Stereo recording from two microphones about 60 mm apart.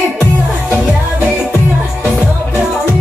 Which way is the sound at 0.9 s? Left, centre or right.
Right.